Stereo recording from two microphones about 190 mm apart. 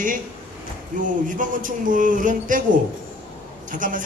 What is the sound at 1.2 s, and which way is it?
A woman's voice, 45° right (ahead or behind).